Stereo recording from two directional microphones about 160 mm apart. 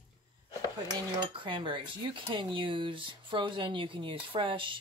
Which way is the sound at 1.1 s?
30° right (ahead or behind).